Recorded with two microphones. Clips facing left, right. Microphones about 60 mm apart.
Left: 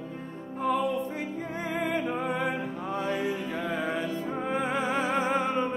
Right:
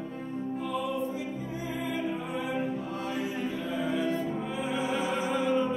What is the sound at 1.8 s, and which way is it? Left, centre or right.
Music, left.